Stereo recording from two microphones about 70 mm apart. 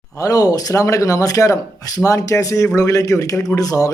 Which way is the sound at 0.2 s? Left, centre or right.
Left.